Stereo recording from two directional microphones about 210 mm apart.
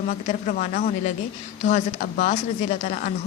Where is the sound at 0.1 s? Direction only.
40° left (ahead or behind).